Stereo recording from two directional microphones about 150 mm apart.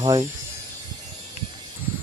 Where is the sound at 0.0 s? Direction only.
25° right (ahead or behind).